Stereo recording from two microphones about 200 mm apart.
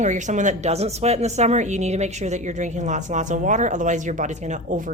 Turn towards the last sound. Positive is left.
turn(degrees=-40)  # may be behind; listen again after turning